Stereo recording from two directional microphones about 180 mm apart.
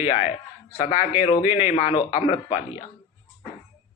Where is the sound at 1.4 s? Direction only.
10° right (ahead or behind).